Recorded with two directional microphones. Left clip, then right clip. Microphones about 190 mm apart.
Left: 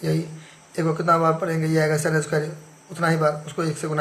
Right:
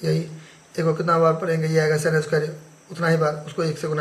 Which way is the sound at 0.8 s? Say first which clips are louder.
Right 1 dB; 15° left (ahead or behind).